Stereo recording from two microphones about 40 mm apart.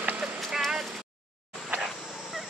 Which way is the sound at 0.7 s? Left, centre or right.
Centre.